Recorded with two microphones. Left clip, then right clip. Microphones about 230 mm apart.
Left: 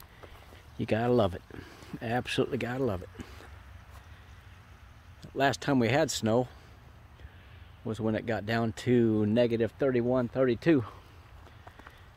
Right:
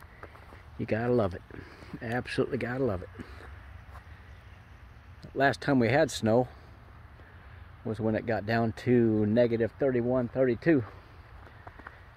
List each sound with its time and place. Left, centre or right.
0.7 s speech: left
5.2 s speech: centre
7.8 s speech: centre